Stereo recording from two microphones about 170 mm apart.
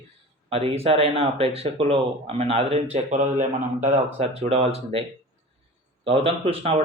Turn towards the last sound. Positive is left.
turn(degrees=-35)  # may be behind; listen again after turning